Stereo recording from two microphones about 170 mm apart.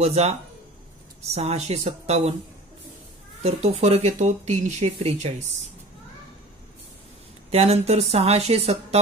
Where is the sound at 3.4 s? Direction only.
40° right (ahead or behind).